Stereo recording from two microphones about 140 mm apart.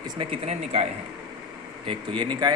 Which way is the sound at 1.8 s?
35° right (ahead or behind).